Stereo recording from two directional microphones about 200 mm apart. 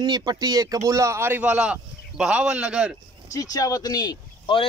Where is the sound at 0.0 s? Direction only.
20° right (ahead or behind); by 3.0 s 5° right (ahead or behind).